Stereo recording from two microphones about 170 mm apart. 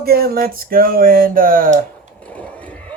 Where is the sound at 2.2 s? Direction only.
10° left (ahead or behind).